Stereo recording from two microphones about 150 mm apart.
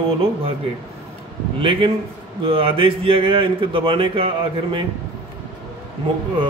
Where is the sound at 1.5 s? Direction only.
35° right (ahead or behind).